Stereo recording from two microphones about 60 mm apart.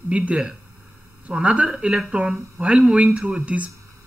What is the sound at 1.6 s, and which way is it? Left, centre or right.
Speech, centre.